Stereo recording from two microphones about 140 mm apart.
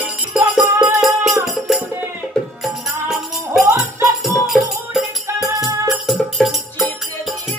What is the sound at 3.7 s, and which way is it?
Music, 20° right (ahead or behind).